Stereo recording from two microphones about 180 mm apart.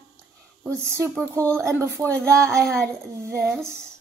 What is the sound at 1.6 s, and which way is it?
Speech, 15° right (ahead or behind).